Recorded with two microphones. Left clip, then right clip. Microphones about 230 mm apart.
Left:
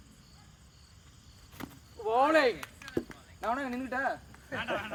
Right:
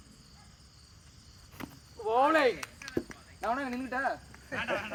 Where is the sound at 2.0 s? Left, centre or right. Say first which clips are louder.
Even; left.